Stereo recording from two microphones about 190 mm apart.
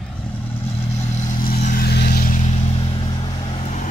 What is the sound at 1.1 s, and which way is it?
Vehicle, 40° left (ahead or behind).